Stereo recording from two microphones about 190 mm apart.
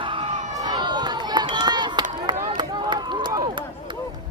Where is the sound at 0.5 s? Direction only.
20° right (ahead or behind).